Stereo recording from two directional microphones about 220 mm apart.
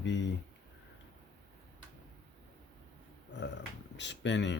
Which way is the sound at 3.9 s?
55° left (ahead or behind).